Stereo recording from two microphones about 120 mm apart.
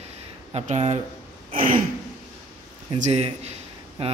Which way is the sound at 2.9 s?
75° right (ahead or behind).